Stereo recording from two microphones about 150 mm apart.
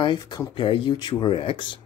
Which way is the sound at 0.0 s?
30° left (ahead or behind).